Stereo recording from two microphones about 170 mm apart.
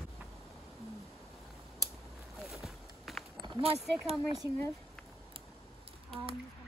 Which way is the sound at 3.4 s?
30° right (ahead or behind).